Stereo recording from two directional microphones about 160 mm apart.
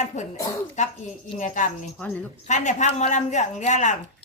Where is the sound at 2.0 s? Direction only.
10° left (ahead or behind).